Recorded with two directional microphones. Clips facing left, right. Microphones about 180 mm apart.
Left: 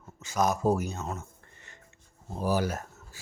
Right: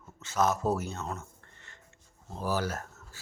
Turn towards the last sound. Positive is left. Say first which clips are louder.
# left 2 dB
turn(degrees=15)  # may be behind; listen again after turning